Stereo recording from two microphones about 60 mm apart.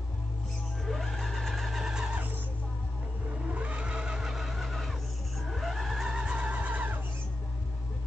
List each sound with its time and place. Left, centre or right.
0.8 s vehicle: centre
2.1 s music: right
3.4 s vehicle: right